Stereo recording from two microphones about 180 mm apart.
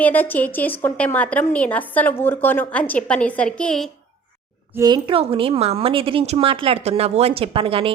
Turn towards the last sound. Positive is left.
turn(degrees=-30)  # may be behind; listen again after turning